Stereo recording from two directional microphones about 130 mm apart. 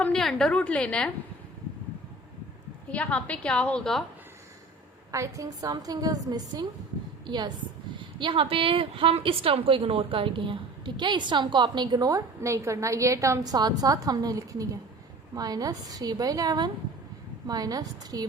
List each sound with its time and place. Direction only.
0.0 s a woman's voice: 5° left (ahead or behind)
2.9 s a woman's voice: 10° left (ahead or behind)
5.1 s a woman's voice: 25° right (ahead or behind)